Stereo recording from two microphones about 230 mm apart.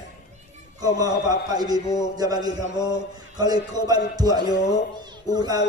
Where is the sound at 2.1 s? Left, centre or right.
Centre.